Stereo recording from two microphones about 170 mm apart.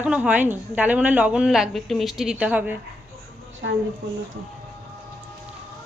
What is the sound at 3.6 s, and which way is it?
Speech, 90° right.